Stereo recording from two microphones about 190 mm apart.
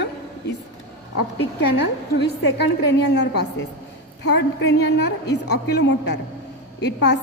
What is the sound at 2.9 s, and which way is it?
A woman's voice, 65° left (ahead or behind).